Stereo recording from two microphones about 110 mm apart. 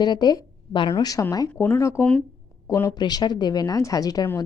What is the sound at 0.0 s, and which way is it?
A woman's voice, 40° left (ahead or behind).